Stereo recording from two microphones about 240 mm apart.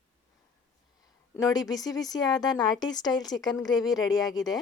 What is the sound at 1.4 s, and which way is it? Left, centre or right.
A woman's voice, centre.